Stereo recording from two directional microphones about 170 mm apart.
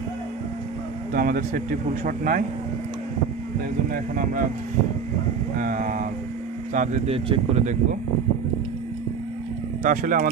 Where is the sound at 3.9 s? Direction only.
50° right (ahead or behind).